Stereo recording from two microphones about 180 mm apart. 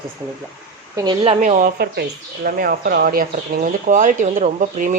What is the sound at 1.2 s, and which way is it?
Speech, 40° right (ahead or behind).